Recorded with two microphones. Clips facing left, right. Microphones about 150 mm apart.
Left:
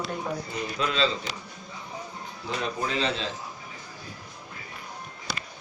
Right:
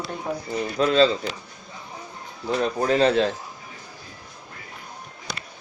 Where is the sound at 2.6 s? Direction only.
45° right (ahead or behind).